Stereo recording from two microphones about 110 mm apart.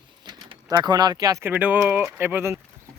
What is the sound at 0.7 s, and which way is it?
Speech, 40° right (ahead or behind).